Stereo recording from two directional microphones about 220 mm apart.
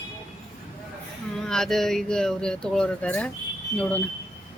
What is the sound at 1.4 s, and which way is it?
Speech, centre (ahead or behind).